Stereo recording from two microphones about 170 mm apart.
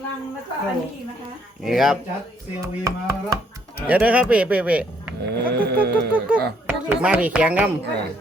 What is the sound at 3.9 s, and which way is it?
Speech, 10° right (ahead or behind).